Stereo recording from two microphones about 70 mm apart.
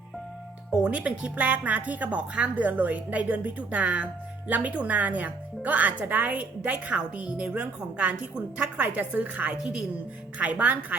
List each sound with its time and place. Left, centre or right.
0.7 s speech: centre